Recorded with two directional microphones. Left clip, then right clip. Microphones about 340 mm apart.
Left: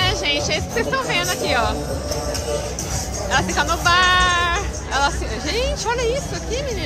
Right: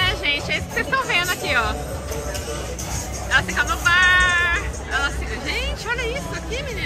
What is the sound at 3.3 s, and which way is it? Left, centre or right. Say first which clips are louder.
Speech: even; centre.